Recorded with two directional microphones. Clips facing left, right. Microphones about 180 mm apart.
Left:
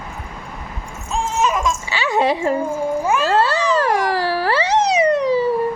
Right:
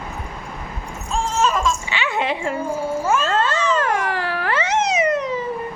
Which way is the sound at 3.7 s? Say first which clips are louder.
Left 3 dB; 35° left (ahead or behind).